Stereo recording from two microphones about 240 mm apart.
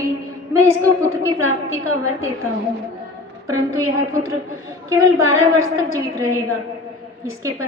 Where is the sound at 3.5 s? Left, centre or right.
Centre.